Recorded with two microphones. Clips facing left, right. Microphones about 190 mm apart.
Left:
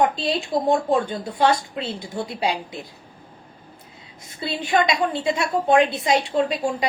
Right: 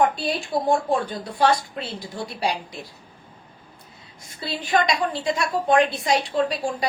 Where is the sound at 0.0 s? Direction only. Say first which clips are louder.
Left 1 dB; 20° left (ahead or behind).